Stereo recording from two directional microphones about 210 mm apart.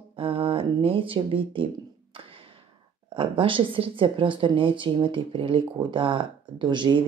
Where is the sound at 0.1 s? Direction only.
25° right (ahead or behind).